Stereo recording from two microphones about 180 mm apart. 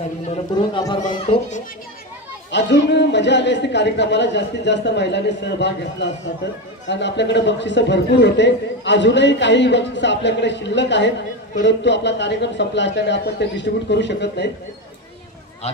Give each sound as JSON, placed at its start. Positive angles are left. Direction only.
{"t": 0.3, "sound": "speech", "side_deg": 25}
{"t": 2.5, "sound": "a man's voice", "side_deg": 75}
{"t": 15.6, "sound": "speech", "side_deg": 35}